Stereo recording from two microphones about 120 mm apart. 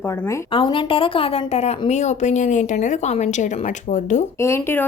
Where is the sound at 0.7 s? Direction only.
45° left (ahead or behind); by 4.2 s 90° left.